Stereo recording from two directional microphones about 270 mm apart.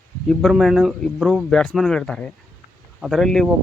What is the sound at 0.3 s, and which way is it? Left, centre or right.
Speech, centre.